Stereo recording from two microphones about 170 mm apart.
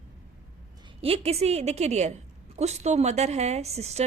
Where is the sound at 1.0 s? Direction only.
35° right (ahead or behind).